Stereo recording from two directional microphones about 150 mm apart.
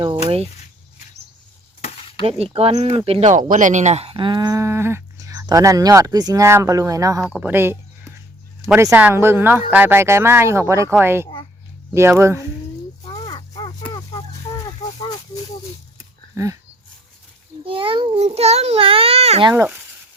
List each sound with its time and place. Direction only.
1.8 s a sound: 40° left (ahead or behind)
2.6 s speech: 40° right (ahead or behind); by 7.2 s 20° right (ahead or behind)
7.2 s speech: 5° right (ahead or behind)
13.6 s a sound: 30° left (ahead or behind)
16.3 s speech: 20° right (ahead or behind)
17.7 s a child's voice: 35° right (ahead or behind)